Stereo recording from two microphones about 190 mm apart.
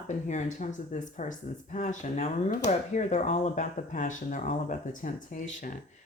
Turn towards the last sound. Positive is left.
turn(degrees=40)  # may be behind; listen again after turning